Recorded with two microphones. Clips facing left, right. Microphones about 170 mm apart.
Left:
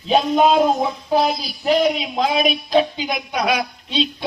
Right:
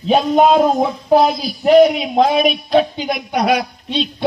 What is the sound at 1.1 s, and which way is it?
Speech, 50° right (ahead or behind).